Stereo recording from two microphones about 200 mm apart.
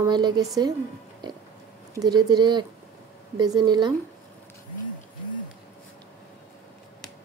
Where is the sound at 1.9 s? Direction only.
20° right (ahead or behind).